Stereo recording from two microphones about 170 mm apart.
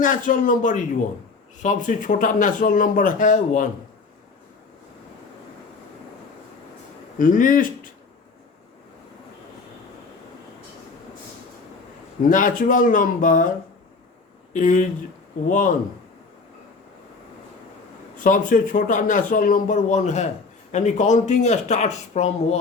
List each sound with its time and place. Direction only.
0.0 s a man's voice: 50° left (ahead or behind)
7.2 s a man's voice: 50° left (ahead or behind)
12.3 s a man's voice: 50° left (ahead or behind)
14.5 s a man's voice: 50° left (ahead or behind)
18.2 s a man's voice: 50° left (ahead or behind)